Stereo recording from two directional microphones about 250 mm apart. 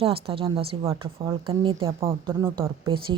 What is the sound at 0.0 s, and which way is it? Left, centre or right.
Speech, right.